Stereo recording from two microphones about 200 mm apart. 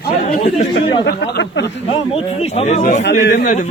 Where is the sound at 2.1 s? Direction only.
30° left (ahead or behind).